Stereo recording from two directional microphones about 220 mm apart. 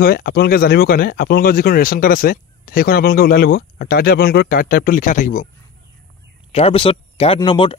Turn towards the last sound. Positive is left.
turn(degrees=20)  # may be behind; listen again after turning